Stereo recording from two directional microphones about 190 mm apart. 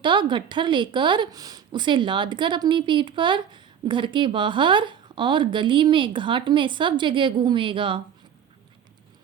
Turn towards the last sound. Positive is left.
turn(degrees=-25)  # may be behind; listen again after turning